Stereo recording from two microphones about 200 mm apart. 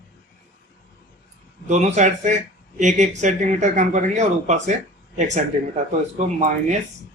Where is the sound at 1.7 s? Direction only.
35° right (ahead or behind).